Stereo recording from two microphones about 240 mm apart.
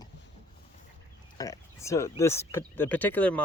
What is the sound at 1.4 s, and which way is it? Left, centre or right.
Speech, centre.